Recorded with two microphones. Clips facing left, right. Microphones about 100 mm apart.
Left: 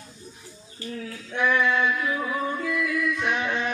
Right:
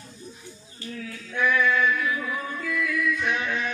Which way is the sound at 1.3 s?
30° left (ahead or behind).